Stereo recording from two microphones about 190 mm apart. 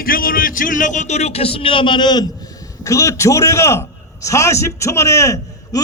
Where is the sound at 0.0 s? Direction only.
50° left (ahead or behind).